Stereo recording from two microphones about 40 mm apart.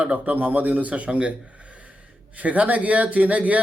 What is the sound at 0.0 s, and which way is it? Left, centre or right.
Speech, right.